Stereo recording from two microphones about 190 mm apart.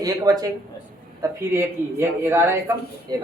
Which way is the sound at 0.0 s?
20° right (ahead or behind).